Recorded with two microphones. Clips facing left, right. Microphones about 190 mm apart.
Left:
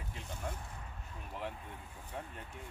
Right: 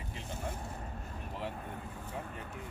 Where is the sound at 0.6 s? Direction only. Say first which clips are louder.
Right 7 dB; 45° right (ahead or behind).